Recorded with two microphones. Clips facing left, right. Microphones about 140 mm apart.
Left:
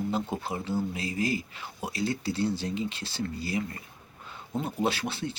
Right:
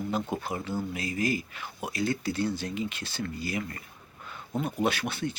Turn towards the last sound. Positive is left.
turn(degrees=30)  # may be behind; listen again after turning